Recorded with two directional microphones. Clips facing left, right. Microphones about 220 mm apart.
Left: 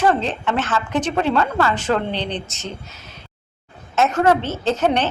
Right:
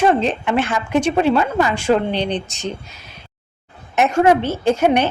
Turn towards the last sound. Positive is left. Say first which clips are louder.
# right 3 dB
turn(degrees=-10)  # may be behind; listen again after turning